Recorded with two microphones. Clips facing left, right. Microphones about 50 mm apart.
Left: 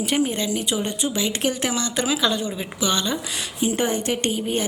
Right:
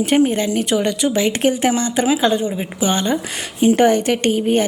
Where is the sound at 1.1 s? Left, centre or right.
Right.